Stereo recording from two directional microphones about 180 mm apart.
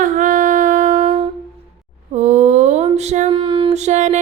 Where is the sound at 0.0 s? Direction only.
45° right (ahead or behind).